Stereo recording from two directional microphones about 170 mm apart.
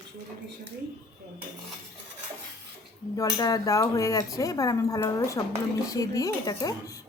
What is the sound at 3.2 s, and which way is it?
A woman's voice, 20° left (ahead or behind).